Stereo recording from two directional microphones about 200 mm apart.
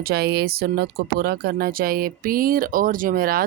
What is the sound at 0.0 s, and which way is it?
Speech, 50° right (ahead or behind).